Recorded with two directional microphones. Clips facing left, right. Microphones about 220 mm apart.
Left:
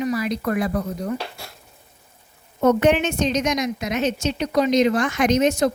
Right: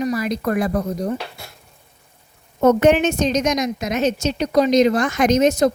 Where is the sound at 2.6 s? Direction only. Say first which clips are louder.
Right 3 dB; 45° right (ahead or behind).